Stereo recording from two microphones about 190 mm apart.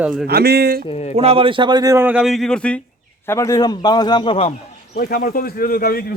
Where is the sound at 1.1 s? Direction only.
30° right (ahead or behind); by 4.5 s 30° left (ahead or behind).